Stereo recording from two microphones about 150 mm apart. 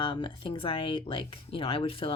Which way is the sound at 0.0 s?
35° left (ahead or behind).